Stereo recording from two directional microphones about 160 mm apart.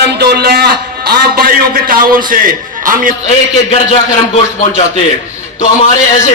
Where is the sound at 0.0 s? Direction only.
85° right; by 3.1 s 60° right (ahead or behind).